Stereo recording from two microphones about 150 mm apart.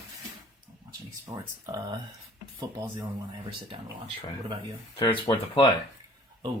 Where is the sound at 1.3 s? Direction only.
15° right (ahead or behind).